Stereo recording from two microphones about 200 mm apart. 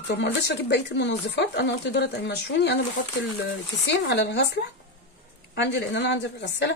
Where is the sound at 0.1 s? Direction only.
55° left (ahead or behind).